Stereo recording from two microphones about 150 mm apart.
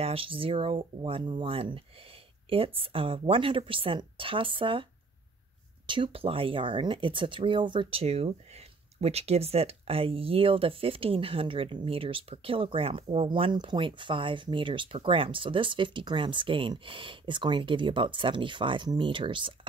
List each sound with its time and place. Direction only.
0.0 s speech: 40° right (ahead or behind)
5.9 s speech: 35° right (ahead or behind)